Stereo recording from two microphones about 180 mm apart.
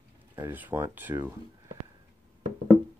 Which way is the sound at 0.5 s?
10° right (ahead or behind).